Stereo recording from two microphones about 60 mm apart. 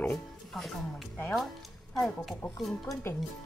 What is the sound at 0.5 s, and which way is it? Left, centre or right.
Speech, centre.